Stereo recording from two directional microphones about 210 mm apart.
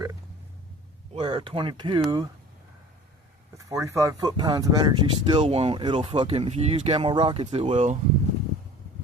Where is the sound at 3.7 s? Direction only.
15° right (ahead or behind); by 7.9 s 30° right (ahead or behind).